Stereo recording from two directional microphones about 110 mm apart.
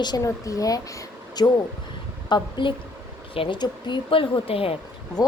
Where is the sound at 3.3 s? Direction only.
55° left (ahead or behind).